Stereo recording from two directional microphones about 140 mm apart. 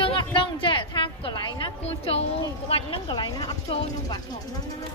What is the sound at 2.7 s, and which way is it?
Speech, 35° left (ahead or behind).